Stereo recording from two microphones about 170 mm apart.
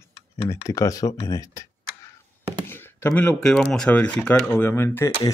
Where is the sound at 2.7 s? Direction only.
15° left (ahead or behind).